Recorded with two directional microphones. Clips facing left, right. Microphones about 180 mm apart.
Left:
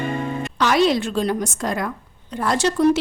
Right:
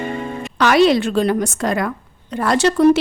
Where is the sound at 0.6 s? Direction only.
70° right (ahead or behind).